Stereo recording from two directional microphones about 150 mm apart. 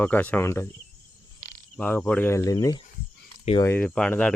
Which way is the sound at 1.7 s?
10° left (ahead or behind).